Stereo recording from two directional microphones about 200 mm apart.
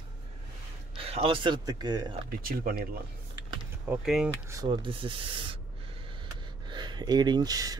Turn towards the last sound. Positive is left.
turn(degrees=-20)  # may be behind; listen again after turning